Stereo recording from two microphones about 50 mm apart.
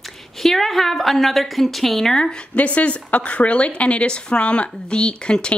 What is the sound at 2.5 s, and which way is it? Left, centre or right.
Speech, left.